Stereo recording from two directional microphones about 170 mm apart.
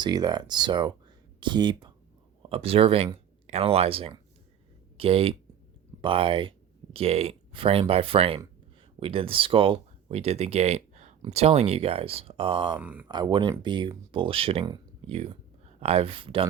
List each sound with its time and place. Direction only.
0.0 s speech: 25° right (ahead or behind)
12.8 s speech: 10° right (ahead or behind)
13.1 s speech: 25° right (ahead or behind)